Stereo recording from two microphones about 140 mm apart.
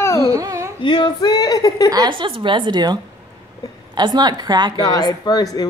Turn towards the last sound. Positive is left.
turn(degrees=25)  # may be behind; listen again after turning